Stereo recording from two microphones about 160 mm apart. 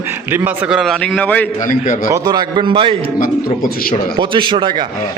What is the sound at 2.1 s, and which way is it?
Speech, 25° right (ahead or behind).